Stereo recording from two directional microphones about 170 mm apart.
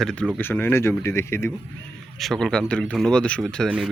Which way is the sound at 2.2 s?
Centre (ahead or behind).